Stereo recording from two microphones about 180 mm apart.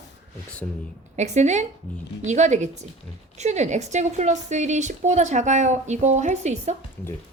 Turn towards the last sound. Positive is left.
turn(degrees=-40)  # may be behind; listen again after turning